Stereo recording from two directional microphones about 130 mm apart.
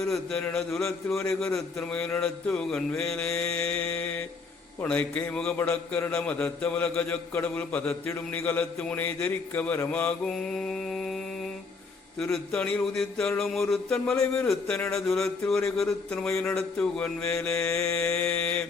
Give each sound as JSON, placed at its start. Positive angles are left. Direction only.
{"t": 0.0, "sound": "a man's voice", "side_deg": 5}
{"t": 12.2, "sound": "a man's voice", "side_deg": 5}